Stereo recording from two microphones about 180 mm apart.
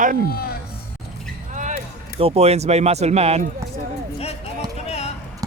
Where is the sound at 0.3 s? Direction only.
60° left (ahead or behind).